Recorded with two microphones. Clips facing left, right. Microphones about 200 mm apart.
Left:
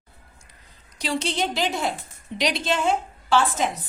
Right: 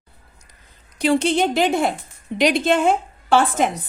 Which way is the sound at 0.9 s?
55° right (ahead or behind).